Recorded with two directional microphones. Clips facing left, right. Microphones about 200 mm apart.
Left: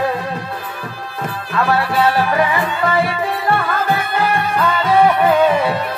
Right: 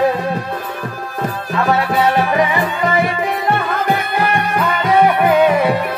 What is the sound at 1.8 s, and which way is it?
Music, 20° right (ahead or behind).